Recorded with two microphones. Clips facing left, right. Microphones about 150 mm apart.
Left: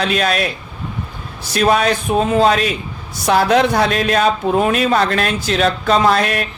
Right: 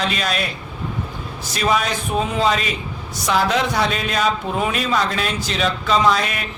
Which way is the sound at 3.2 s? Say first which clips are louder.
Left 6 dB; 60° left (ahead or behind).